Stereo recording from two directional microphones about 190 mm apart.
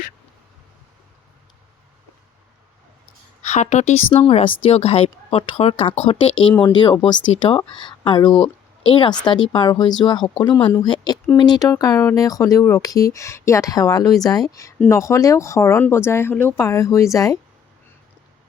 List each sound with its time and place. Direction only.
3.4 s a woman's voice: 40° left (ahead or behind); by 17.3 s 15° left (ahead or behind)